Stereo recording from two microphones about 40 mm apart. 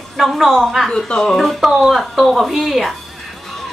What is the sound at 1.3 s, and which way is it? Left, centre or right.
Speech, centre.